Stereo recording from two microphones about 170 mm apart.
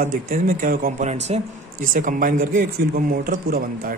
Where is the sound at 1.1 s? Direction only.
40° right (ahead or behind).